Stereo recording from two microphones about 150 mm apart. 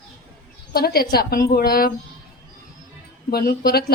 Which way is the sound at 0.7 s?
90° left.